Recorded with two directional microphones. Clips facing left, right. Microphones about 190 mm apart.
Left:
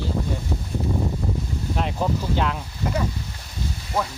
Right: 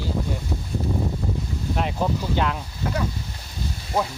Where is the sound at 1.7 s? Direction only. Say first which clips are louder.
Even; centre (ahead or behind).